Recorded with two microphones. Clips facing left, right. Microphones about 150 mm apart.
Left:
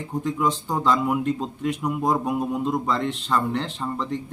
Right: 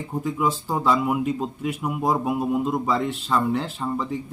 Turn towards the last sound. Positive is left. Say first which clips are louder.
# right 1 dB
turn(degrees=-5)  # may be behind; listen again after turning